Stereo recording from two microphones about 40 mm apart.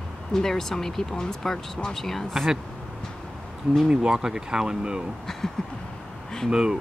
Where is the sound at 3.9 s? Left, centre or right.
Centre.